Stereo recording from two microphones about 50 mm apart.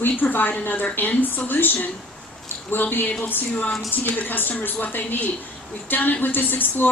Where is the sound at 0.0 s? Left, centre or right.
Left.